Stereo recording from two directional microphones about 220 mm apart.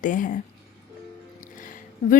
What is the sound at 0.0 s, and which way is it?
Speech, 35° left (ahead or behind).